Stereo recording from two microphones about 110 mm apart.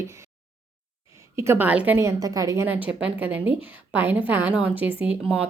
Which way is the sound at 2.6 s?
15° right (ahead or behind).